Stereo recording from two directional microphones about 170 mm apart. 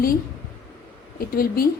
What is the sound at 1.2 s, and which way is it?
Speech, 60° left (ahead or behind).